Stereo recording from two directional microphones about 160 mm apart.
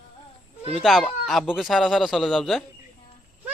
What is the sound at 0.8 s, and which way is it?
Speech, centre (ahead or behind).